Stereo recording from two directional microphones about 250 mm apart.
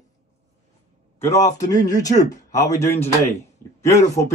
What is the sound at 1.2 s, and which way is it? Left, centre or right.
A man's voice, centre.